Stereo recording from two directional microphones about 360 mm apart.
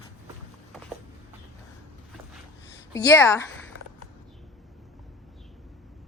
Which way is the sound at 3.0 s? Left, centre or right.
Centre.